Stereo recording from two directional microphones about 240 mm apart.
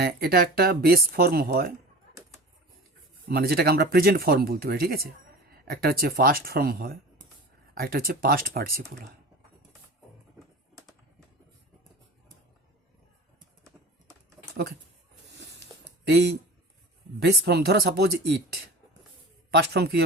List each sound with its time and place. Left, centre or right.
0.0 s speech: right
3.2 s speech: right
14.5 s speech: right
15.7 s a sound: centre
16.0 s speech: right